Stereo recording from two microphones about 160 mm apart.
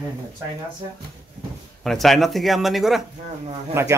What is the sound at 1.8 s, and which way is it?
Speech, centre (ahead or behind).